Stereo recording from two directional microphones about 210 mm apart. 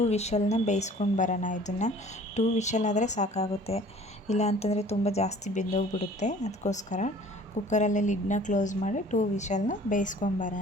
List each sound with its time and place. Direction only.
0.0 s a woman's voice: 30° left (ahead or behind)